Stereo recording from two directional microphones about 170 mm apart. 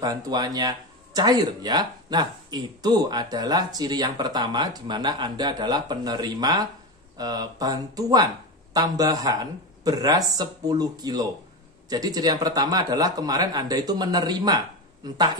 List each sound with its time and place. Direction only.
0.0 s speech: 20° right (ahead or behind)